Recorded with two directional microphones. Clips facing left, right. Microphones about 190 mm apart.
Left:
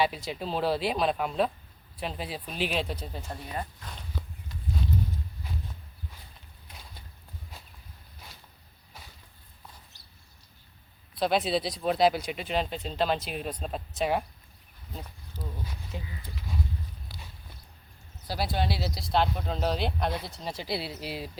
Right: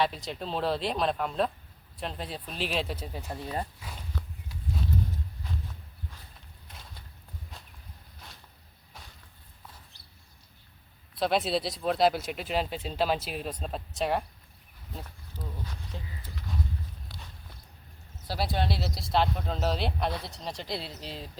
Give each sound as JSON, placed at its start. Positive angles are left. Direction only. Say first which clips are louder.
{"t": 0.0, "sound": "speech", "louder": "left 1 dB", "side_deg": 5}
{"t": 8.9, "sound": "a sound", "louder": "even", "side_deg": 0}
{"t": 11.1, "sound": "speech", "louder": "left 1 dB", "side_deg": 0}
{"t": 17.1, "sound": "walk", "louder": "even", "side_deg": 0}
{"t": 18.3, "sound": "speech", "louder": "even", "side_deg": 0}